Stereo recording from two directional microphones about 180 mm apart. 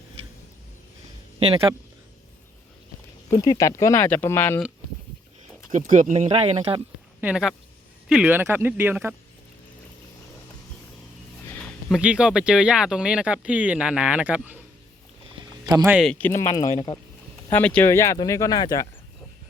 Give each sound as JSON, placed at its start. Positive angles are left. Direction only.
{"t": 1.4, "sound": "speech", "side_deg": -35}
{"t": 3.2, "sound": "speech", "side_deg": 20}
{"t": 5.7, "sound": "speech", "side_deg": -45}
{"t": 7.2, "sound": "speech", "side_deg": -5}
{"t": 11.9, "sound": "speech", "side_deg": -5}
{"t": 15.6, "sound": "speech", "side_deg": -20}
{"t": 15.9, "sound": "speech", "side_deg": 0}
{"t": 16.1, "sound": "speech", "side_deg": 10}
{"t": 17.5, "sound": "speech", "side_deg": 10}